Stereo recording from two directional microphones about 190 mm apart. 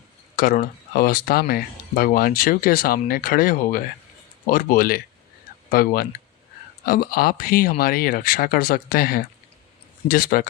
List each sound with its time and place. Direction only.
0.3 s speech: 45° left (ahead or behind)